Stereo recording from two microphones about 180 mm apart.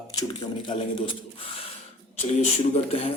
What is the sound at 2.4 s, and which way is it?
Speech, 35° left (ahead or behind).